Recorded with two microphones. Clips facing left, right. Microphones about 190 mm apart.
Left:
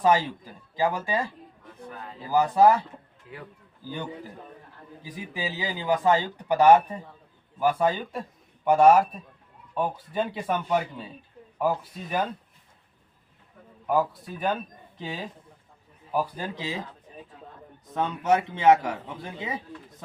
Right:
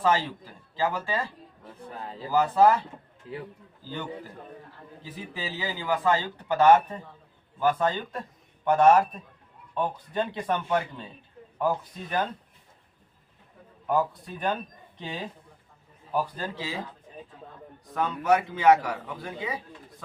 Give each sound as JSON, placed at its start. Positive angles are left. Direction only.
{"t": 0.0, "sound": "speech", "side_deg": 15}
{"t": 1.6, "sound": "a sound", "side_deg": -30}
{"t": 2.3, "sound": "speech", "side_deg": 15}
{"t": 5.0, "sound": "speech", "side_deg": 15}
{"t": 13.8, "sound": "speech", "side_deg": 5}
{"t": 17.9, "sound": "a man's voice", "side_deg": 25}